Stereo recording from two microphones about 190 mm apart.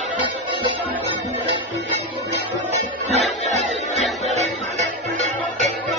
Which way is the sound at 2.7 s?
35° right (ahead or behind).